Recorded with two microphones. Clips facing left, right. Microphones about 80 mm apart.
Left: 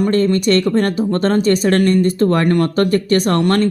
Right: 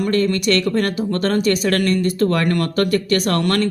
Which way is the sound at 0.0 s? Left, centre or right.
Left.